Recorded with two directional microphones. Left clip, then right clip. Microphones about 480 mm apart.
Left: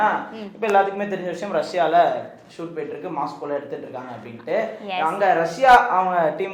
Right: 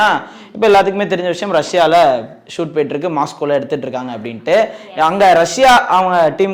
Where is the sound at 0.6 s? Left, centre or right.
Right.